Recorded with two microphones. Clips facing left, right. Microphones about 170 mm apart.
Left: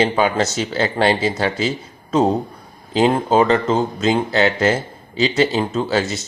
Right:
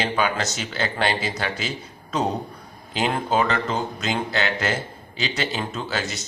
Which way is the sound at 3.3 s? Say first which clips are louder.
Left 7 dB; 35° left (ahead or behind).